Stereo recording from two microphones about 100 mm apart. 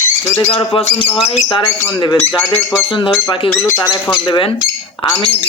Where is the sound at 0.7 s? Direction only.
65° left (ahead or behind).